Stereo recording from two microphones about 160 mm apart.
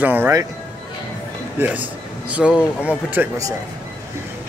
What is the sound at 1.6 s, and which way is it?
A man's voice, 10° right (ahead or behind).